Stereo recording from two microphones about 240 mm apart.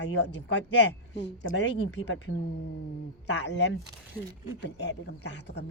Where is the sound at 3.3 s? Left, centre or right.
Left.